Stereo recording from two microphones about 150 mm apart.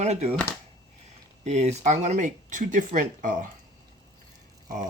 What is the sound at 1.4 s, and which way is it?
Speech, 50° right (ahead or behind).